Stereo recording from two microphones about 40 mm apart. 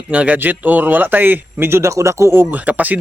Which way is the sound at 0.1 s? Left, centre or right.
Right.